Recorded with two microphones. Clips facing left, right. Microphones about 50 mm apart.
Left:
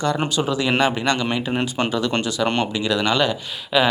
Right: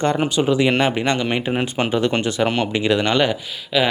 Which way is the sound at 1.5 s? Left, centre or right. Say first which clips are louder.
Right 1 dB; centre.